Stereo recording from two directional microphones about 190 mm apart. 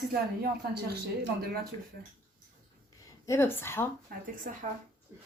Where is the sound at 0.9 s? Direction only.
55° right (ahead or behind).